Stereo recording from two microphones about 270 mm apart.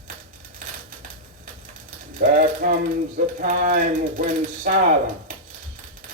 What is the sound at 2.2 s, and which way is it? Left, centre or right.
Music, right.